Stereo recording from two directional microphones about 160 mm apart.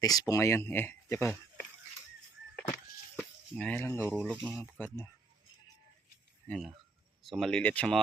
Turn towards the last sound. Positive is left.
turn(degrees=10)  # may be behind; listen again after turning